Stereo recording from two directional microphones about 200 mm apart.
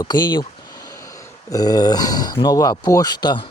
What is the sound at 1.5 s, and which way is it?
Speech, 20° left (ahead or behind).